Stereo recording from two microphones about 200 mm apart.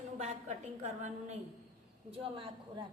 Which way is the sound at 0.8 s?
35° right (ahead or behind).